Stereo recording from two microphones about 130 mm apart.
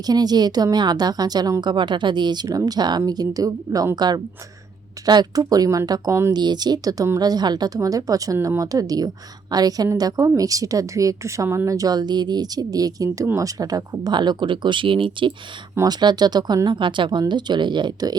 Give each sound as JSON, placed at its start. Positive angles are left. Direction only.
{"t": 0.0, "sound": "a woman's voice", "side_deg": -30}
{"t": 6.3, "sound": "a woman's voice", "side_deg": -35}
{"t": 15.7, "sound": "a woman's voice", "side_deg": -30}